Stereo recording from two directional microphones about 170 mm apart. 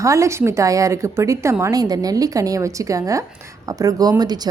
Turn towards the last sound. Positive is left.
turn(degrees=-25)  # may be behind; listen again after turning